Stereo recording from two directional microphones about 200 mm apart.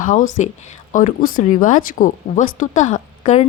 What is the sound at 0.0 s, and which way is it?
A woman's voice, 40° left (ahead or behind).